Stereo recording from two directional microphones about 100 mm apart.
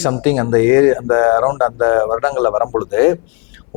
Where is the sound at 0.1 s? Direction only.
15° left (ahead or behind).